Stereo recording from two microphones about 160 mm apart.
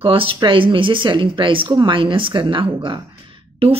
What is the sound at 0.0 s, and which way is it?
Speech, 35° right (ahead or behind).